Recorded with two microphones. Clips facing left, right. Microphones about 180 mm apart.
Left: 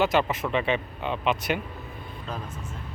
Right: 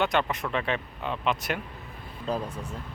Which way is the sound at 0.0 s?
5° left (ahead or behind).